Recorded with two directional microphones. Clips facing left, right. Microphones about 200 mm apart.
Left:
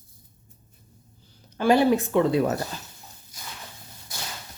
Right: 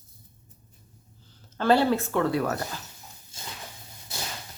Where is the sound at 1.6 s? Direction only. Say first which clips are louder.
Left 2 dB; 15° left (ahead or behind).